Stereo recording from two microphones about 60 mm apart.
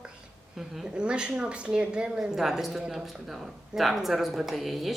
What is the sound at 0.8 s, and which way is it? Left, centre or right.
Speech, centre.